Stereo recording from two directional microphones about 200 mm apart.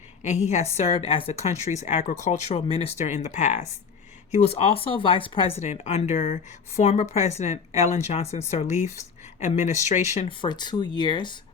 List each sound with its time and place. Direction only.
0.2 s speech: 35° left (ahead or behind)